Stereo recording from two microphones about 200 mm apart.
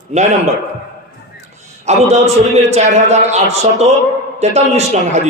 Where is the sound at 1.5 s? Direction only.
35° right (ahead or behind).